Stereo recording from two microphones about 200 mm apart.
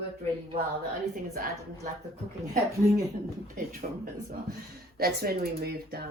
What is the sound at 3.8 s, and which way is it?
A woman's voice, 40° right (ahead or behind).